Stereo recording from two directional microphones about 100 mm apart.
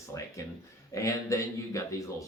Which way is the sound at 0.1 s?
35° left (ahead or behind).